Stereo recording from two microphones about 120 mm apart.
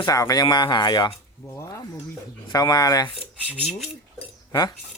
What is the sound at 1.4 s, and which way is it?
Speech, 25° left (ahead or behind).